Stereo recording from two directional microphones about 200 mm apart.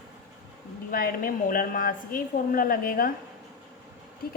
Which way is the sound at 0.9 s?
45° left (ahead or behind).